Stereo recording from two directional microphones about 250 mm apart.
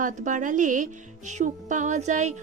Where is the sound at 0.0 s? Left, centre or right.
Right.